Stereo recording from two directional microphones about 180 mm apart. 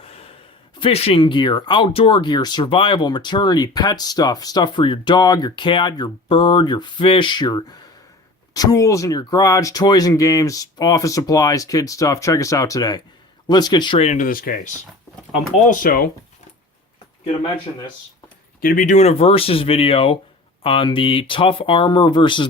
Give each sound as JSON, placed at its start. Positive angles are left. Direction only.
{"t": 0.0, "sound": "a sound", "side_deg": 35}
{"t": 0.8, "sound": "speech", "side_deg": 35}
{"t": 18.6, "sound": "speech", "side_deg": 50}